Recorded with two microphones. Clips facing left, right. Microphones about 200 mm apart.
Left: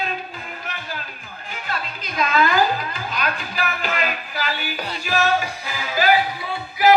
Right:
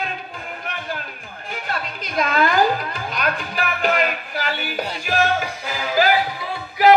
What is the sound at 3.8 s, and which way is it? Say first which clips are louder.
Music: right 5 dB; 55° right (ahead or behind).